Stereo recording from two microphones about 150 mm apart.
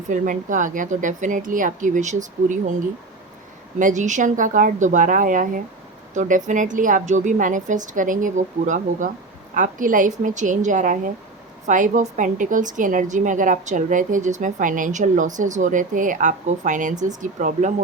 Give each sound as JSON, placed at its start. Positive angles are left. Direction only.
{"t": 0.1, "sound": "a woman's voice", "side_deg": -60}
{"t": 3.8, "sound": "a woman's voice", "side_deg": -60}